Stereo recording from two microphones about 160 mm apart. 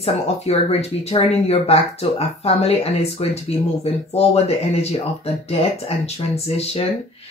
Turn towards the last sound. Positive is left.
turn(degrees=40)  # may be behind; listen again after turning